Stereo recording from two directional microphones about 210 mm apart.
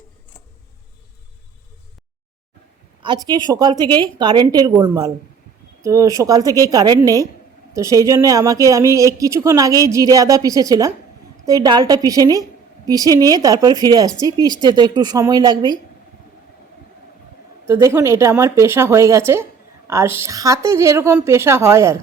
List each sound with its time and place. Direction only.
3.0 s a woman's voice: 20° right (ahead or behind)
17.7 s speech: 15° right (ahead or behind)